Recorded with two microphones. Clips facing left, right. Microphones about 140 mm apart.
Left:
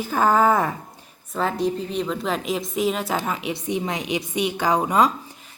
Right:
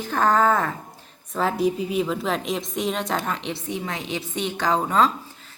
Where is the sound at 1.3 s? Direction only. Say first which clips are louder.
Right 1 dB; centre (ahead or behind).